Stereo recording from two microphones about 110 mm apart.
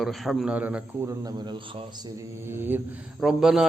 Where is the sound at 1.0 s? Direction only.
35° right (ahead or behind).